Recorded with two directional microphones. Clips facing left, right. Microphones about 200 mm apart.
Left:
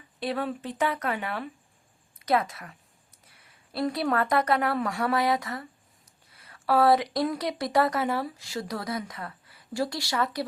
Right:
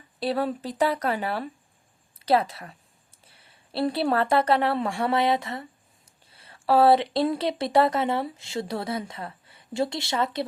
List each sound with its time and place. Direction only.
0.2 s a woman's voice: 35° right (ahead or behind)